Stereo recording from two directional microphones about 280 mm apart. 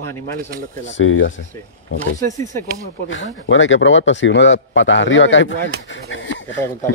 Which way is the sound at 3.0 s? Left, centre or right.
Left.